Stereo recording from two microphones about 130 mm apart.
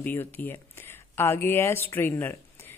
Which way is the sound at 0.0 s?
15° left (ahead or behind).